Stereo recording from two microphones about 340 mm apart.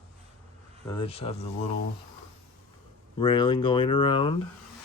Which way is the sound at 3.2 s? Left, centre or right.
Centre.